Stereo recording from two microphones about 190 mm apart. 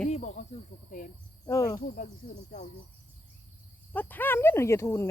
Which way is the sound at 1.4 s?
20° left (ahead or behind).